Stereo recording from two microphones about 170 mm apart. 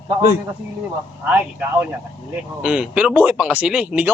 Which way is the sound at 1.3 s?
10° right (ahead or behind).